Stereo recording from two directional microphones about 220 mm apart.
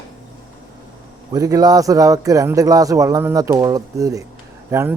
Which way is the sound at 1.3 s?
15° right (ahead or behind).